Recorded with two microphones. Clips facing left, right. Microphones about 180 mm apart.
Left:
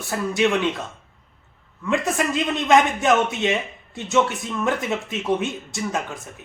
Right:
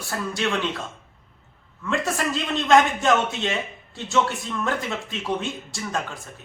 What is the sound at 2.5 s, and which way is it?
Speech, 20° left (ahead or behind).